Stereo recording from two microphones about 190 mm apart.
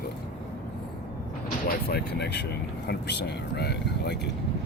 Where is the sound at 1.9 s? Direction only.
60° left (ahead or behind).